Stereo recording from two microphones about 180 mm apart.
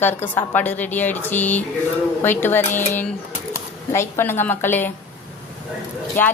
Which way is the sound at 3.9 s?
15° left (ahead or behind).